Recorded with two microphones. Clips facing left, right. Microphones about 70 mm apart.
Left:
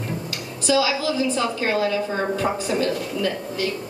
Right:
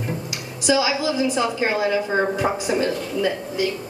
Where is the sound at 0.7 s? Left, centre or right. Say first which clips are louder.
Right 1 dB; centre.